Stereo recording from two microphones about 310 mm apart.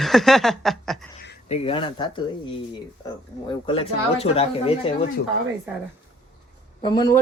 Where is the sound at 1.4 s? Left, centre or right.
Centre.